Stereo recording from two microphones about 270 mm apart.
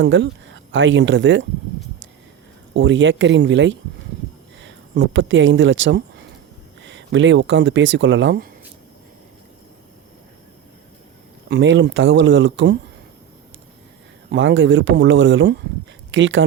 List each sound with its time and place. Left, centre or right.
0.0 s speech: right
2.7 s speech: right
11.4 s speech: right
14.3 s speech: right